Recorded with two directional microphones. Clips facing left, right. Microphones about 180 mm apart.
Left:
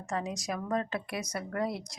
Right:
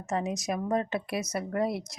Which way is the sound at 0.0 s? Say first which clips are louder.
Right 4 dB; 20° right (ahead or behind).